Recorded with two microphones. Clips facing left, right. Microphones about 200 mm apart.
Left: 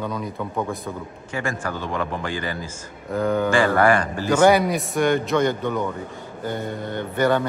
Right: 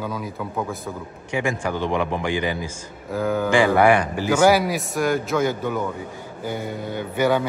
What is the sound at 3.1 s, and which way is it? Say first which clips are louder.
Speech: left 1 dB; 5° right (ahead or behind).